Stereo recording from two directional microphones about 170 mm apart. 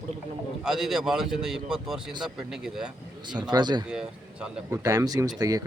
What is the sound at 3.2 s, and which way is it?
Speech, 25° right (ahead or behind).